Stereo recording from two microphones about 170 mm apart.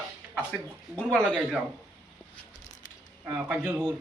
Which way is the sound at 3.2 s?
10° right (ahead or behind).